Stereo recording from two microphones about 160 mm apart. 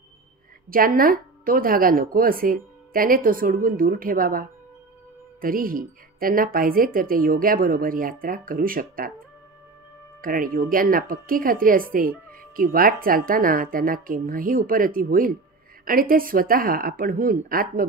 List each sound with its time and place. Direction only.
0.7 s a woman's voice: 65° right (ahead or behind)
10.2 s a woman's voice: 60° right (ahead or behind)